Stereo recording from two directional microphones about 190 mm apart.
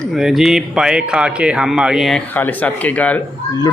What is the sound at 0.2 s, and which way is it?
Speech, centre (ahead or behind).